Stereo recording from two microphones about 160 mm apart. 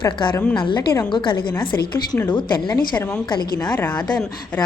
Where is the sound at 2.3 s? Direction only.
30° left (ahead or behind).